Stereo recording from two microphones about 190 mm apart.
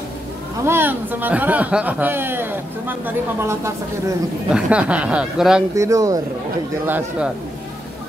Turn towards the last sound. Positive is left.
turn(degrees=-10)  # may be behind; listen again after turning